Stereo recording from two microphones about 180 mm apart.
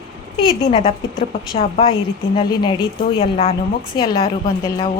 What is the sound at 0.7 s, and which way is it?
A woman's voice, 35° left (ahead or behind).